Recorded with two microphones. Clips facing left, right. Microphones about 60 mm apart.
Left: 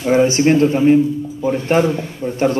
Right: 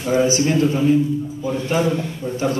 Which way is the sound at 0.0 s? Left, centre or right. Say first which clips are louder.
Left 4 dB; left.